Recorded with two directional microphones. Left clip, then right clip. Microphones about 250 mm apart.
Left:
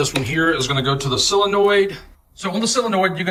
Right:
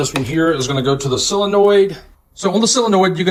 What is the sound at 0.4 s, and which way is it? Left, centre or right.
Speech, centre.